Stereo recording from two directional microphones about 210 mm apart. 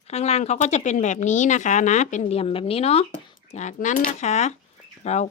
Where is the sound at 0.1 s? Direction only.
30° left (ahead or behind).